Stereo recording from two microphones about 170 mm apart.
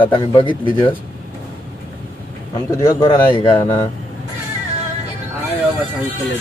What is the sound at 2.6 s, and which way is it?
Speech, 15° left (ahead or behind).